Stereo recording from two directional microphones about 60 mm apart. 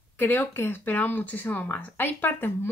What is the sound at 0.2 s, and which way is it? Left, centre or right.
Speech, left.